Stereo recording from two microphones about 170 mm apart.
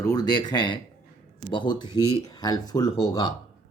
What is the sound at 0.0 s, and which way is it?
Speech, 20° left (ahead or behind).